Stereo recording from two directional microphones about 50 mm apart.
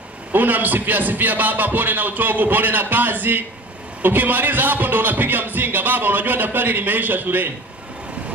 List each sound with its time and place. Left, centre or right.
0.3 s speech: right